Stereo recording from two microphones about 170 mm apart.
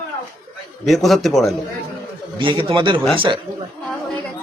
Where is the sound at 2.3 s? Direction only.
30° right (ahead or behind).